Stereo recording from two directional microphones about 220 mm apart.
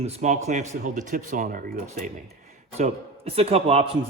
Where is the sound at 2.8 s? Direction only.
25° right (ahead or behind).